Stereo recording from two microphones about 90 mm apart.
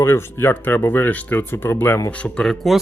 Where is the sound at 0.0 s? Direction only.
25° left (ahead or behind).